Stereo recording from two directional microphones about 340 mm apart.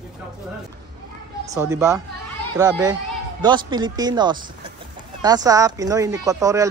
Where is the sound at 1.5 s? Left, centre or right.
Centre.